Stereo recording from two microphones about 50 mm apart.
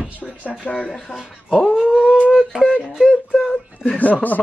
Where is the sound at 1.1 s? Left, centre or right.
Centre.